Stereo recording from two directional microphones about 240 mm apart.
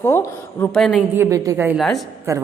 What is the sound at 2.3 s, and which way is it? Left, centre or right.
Speech, centre.